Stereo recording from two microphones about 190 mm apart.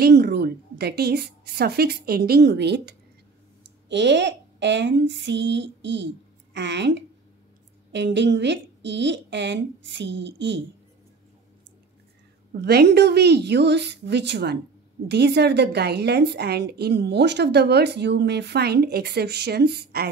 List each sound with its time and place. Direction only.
0.0 s a woman's voice: 60° right (ahead or behind)
12.5 s a woman's voice: 60° right (ahead or behind)